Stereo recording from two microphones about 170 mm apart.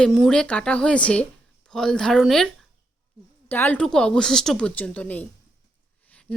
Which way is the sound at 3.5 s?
10° left (ahead or behind).